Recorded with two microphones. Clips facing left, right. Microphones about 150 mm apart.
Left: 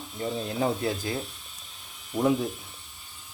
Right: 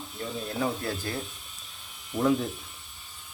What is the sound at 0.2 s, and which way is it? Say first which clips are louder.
Speech: left 3 dB; 20° left (ahead or behind).